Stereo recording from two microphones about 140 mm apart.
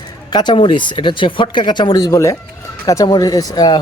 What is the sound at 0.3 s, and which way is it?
Speech, 30° left (ahead or behind).